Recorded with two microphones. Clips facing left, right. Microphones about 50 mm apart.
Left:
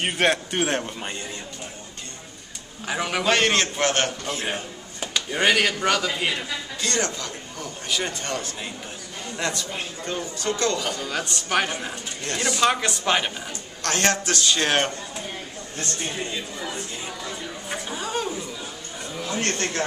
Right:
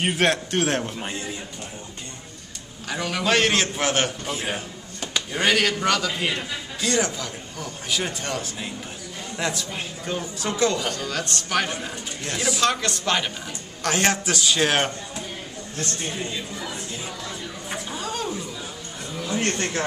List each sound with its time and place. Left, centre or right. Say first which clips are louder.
0.0 s a man's voice: even; centre
2.9 s a man's voice: left 2 dB; centre
3.3 s a man's voice: right 1 dB; centre
5.3 s a man's voice: left 1 dB; centre
6.8 s a man's voice: right 3 dB; centre
10.9 s a man's voice: even; centre
12.3 s a man's voice: left 1 dB; centre
12.6 s a man's voice: left 2 dB; centre
13.8 s a man's voice: right 1 dB; centre
17.2 s a sound: left 1 dB; centre
17.9 s chatter: left 2 dB; centre
19.2 s a sound: right 2 dB; centre
19.5 s a man's voice: even; centre